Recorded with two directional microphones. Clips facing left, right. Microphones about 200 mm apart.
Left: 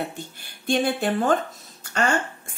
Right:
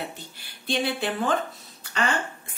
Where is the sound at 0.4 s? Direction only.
45° left (ahead or behind).